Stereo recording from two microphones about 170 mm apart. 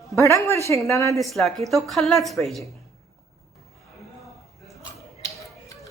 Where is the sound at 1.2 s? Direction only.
Centre (ahead or behind).